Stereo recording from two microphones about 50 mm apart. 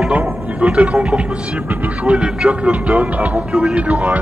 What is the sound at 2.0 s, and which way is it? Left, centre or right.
Speech, centre.